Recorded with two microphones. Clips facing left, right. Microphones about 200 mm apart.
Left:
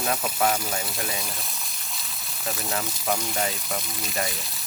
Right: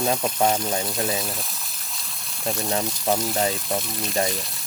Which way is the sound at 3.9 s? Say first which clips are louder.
Right 5 dB; centre (ahead or behind).